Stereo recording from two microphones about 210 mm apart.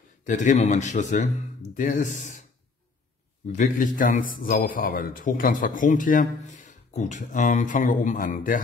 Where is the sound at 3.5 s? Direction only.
35° left (ahead or behind).